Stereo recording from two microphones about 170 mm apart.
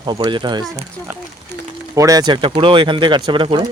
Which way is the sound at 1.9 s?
20° right (ahead or behind).